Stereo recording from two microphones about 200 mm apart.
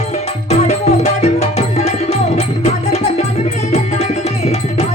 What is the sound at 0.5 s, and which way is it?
Music, 35° left (ahead or behind).